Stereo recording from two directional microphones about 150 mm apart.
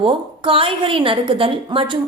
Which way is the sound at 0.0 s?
35° right (ahead or behind).